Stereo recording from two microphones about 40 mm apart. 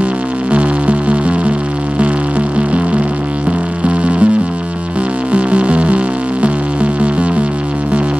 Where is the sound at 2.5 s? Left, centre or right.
Right.